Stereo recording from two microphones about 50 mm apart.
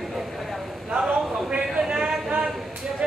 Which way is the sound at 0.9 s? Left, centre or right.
Centre.